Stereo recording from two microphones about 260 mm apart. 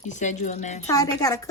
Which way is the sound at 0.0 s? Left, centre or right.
Left.